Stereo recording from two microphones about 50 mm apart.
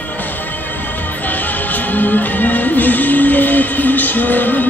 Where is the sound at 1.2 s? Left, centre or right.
Left.